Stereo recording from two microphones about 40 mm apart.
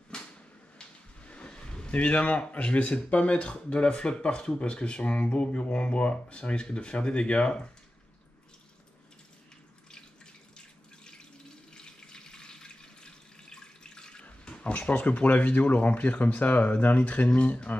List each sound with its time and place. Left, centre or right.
0.1 s a sound: left
1.9 s speech: left
11.7 s water tap: centre
14.2 s speech: left